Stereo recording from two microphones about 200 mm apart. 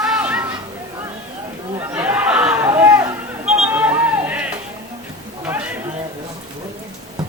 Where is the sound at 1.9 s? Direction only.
10° right (ahead or behind).